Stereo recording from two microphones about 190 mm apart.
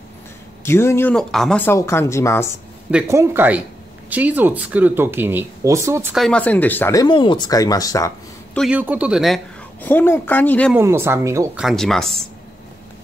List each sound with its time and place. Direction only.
0.7 s speech: 15° left (ahead or behind)
2.9 s speech: 10° right (ahead or behind)
6.1 s speech: 5° left (ahead or behind)
8.5 s speech: 5° right (ahead or behind); by 10.7 s 10° left (ahead or behind)
10.7 s speech: 15° right (ahead or behind)
11.6 s speech: centre (ahead or behind)